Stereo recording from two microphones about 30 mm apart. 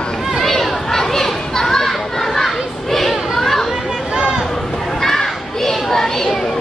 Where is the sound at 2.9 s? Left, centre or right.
Centre.